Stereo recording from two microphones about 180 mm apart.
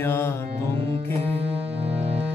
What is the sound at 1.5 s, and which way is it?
Music, 10° right (ahead or behind).